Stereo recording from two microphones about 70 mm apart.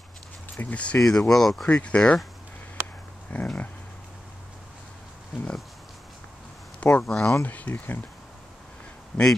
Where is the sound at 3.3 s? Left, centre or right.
Left.